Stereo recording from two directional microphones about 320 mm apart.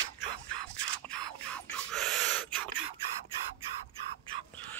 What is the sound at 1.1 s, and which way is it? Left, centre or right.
Gasp, centre.